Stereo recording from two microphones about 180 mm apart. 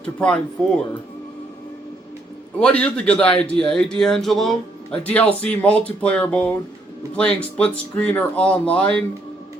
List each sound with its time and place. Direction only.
0.0 s speech: 5° left (ahead or behind)
2.6 s speech: 5° left (ahead or behind)